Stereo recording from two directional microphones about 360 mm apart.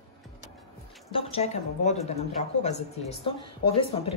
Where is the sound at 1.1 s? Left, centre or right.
Centre.